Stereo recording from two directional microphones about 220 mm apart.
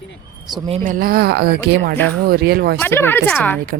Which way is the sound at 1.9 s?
10° left (ahead or behind).